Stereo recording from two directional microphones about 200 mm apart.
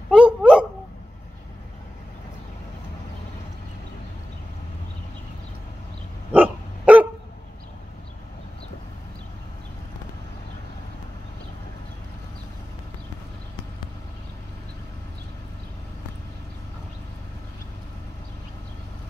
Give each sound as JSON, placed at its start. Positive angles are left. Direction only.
{"t": 0.1, "sound": "dog", "side_deg": -5}
{"t": 6.3, "sound": "dog", "side_deg": -5}